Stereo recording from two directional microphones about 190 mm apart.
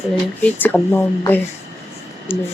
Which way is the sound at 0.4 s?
10° left (ahead or behind).